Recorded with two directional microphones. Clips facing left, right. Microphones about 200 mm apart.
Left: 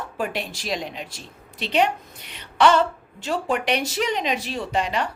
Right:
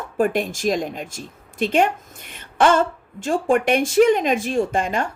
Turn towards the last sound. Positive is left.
turn(degrees=-50)  # may be behind; listen again after turning